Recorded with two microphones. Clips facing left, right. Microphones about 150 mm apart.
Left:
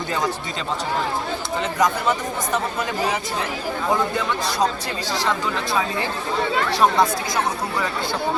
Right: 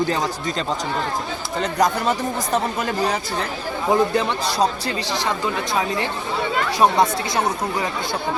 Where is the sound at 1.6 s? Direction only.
35° right (ahead or behind).